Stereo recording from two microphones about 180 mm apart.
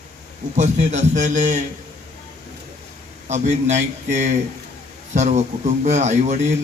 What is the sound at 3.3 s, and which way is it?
A man's voice, 40° right (ahead or behind).